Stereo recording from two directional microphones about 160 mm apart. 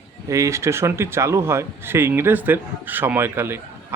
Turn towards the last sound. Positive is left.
turn(degrees=-15)  # may be behind; listen again after turning